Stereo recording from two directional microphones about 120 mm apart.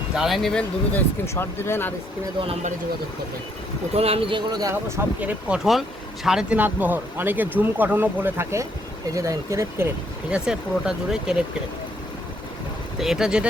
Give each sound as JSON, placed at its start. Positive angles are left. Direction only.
{"t": 0.2, "sound": "speech", "side_deg": 0}
{"t": 0.9, "sound": "speech", "side_deg": 20}
{"t": 3.9, "sound": "speech", "side_deg": -55}
{"t": 4.7, "sound": "speech", "side_deg": -20}
{"t": 10.2, "sound": "speech", "side_deg": -5}
{"t": 13.0, "sound": "speech", "side_deg": -5}